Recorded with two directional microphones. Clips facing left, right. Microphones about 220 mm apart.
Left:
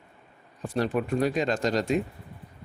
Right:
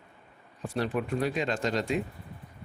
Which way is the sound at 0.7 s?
40° left (ahead or behind).